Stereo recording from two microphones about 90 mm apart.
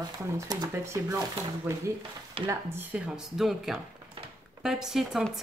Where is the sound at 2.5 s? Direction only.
25° right (ahead or behind).